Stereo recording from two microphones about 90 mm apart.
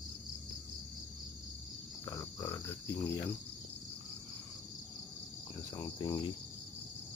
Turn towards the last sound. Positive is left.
turn(degrees=45)  # may be behind; listen again after turning